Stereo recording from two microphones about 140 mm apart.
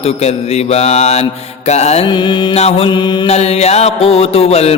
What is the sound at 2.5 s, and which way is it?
Mantra, 50° left (ahead or behind).